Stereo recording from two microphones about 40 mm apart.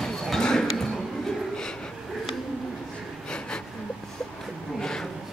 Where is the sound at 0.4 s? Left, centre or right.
Centre.